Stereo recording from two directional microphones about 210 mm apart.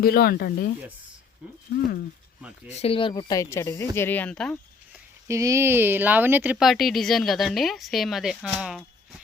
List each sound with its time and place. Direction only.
0.0 s speech: 45° left (ahead or behind)
2.6 s speech: 30° left (ahead or behind); by 4.5 s 5° left (ahead or behind)
5.3 s speech: 15° right (ahead or behind)